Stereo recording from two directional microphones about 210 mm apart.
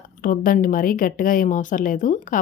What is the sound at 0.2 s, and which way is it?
Speech, 40° left (ahead or behind).